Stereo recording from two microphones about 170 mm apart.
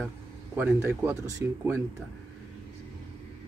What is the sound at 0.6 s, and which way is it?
Speech, 10° right (ahead or behind).